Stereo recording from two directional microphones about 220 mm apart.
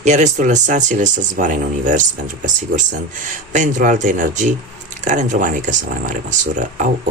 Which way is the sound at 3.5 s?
35° right (ahead or behind).